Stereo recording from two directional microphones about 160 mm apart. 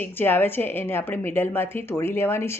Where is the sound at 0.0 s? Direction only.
15° left (ahead or behind).